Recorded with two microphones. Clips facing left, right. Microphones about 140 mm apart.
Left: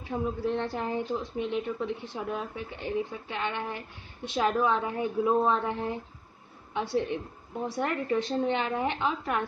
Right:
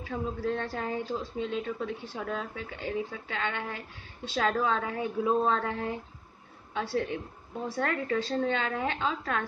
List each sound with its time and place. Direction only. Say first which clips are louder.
0.1 s a woman's voice: left 2 dB; 20° left (ahead or behind)